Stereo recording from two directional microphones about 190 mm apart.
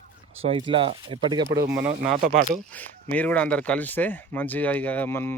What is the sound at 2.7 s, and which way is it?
Speech, 10° left (ahead or behind).